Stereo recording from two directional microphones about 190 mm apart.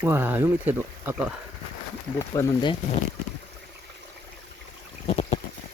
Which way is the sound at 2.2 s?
15° left (ahead or behind).